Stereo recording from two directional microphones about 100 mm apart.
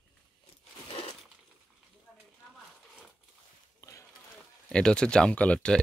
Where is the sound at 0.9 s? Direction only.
90° left.